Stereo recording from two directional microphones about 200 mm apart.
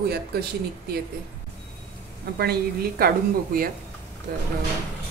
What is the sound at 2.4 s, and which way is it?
Speech, 50° right (ahead or behind).